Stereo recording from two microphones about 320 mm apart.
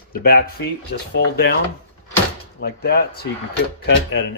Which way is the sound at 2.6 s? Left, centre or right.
Left.